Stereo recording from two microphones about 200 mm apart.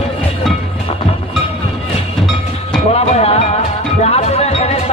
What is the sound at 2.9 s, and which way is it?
Music, 30° left (ahead or behind).